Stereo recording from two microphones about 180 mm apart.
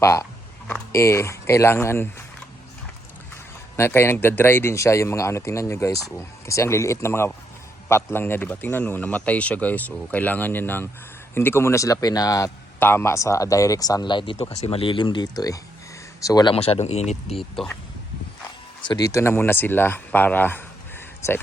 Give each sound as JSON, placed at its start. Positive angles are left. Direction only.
{"t": 0.0, "sound": "speech", "side_deg": 15}
{"t": 3.8, "sound": "speech", "side_deg": 15}
{"t": 18.8, "sound": "speech", "side_deg": 25}